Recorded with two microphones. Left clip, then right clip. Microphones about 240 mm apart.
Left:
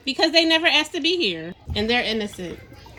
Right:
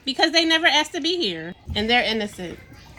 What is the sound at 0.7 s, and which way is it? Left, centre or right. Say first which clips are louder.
Speech: left 1 dB; right.